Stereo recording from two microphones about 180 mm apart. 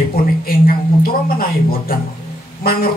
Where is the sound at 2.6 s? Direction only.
55° left (ahead or behind).